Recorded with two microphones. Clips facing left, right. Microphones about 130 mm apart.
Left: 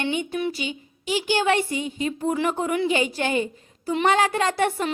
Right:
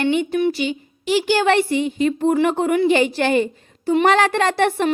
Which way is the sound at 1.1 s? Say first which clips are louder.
Right 5 dB; 75° right (ahead or behind).